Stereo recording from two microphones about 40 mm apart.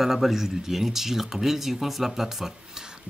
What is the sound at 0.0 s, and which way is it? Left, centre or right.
Speech, centre.